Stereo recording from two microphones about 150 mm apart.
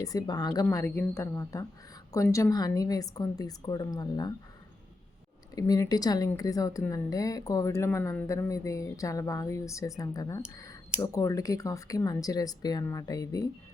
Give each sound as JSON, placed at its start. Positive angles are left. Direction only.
{"t": 0.0, "sound": "a woman's voice", "side_deg": 25}
{"t": 5.5, "sound": "a woman's voice", "side_deg": 25}